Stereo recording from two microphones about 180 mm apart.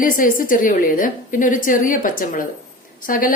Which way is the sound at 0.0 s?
50° left (ahead or behind).